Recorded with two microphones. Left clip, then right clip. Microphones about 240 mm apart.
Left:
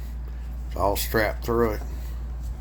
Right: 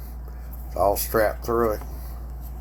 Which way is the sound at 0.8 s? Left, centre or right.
Left.